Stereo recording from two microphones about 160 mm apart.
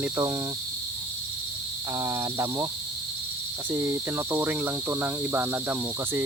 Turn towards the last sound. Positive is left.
turn(degrees=-15)  # may be behind; listen again after turning